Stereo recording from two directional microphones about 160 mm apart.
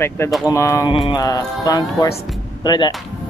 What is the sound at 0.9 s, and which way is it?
Speech, 35° left (ahead or behind).